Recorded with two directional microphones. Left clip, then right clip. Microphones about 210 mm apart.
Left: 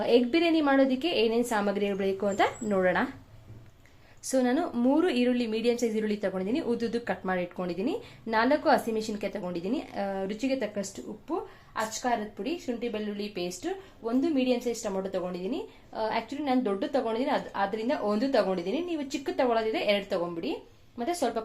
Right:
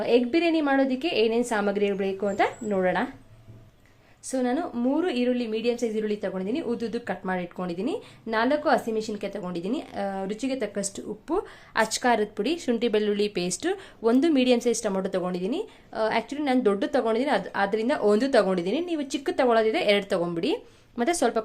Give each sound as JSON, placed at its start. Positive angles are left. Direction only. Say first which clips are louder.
{"t": 0.0, "sound": "a woman's voice", "louder": "right 2 dB", "side_deg": -5}
{"t": 4.3, "sound": "a woman's voice", "louder": "even", "side_deg": 0}
{"t": 11.3, "sound": "a woman's voice", "louder": "right 6 dB", "side_deg": -45}